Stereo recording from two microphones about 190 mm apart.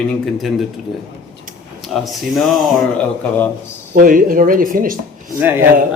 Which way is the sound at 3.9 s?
45° right (ahead or behind).